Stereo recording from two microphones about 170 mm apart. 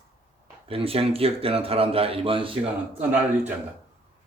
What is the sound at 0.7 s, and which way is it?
Speech, 35° right (ahead or behind).